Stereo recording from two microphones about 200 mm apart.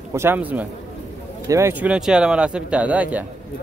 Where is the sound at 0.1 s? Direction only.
10° right (ahead or behind).